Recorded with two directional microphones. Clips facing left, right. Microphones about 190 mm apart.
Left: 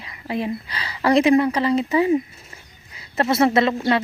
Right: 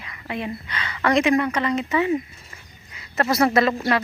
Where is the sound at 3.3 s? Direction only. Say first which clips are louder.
Left 1 dB; 25° left (ahead or behind).